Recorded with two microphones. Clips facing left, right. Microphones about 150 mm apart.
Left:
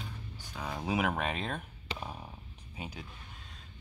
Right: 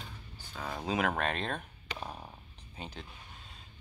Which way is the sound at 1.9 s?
30° left (ahead or behind).